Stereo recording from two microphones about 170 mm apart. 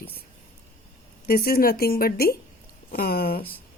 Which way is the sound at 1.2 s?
60° left (ahead or behind).